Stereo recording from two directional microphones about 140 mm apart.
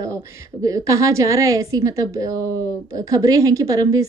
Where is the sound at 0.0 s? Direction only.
25° right (ahead or behind).